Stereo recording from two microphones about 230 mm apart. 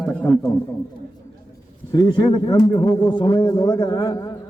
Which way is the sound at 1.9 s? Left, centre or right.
Centre.